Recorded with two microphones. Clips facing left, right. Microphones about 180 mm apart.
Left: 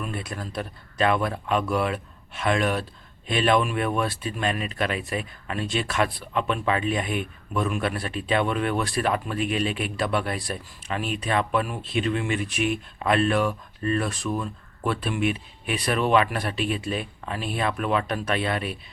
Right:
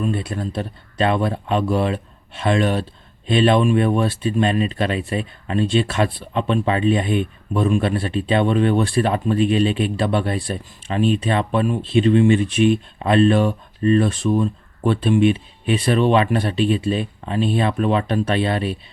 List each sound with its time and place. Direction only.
0.0 s speech: 30° right (ahead or behind)